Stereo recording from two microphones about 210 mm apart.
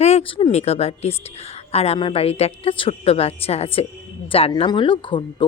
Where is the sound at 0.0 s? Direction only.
30° left (ahead or behind).